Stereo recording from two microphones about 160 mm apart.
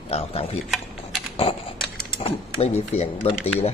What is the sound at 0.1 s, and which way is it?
Speech, 40° left (ahead or behind).